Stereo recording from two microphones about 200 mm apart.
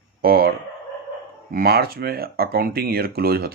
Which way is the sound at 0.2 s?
50° right (ahead or behind).